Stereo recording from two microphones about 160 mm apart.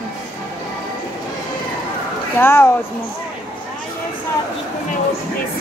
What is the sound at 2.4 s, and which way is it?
Speech, 15° left (ahead or behind).